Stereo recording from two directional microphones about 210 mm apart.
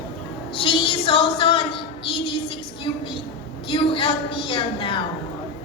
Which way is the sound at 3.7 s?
25° left (ahead or behind).